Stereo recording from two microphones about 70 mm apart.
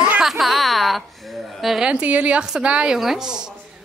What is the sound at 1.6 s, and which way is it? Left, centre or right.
Speech, centre.